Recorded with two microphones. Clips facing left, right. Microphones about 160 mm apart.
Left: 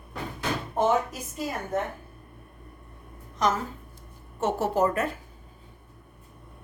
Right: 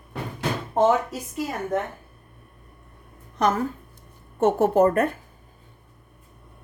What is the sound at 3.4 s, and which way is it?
A woman's voice, 55° right (ahead or behind).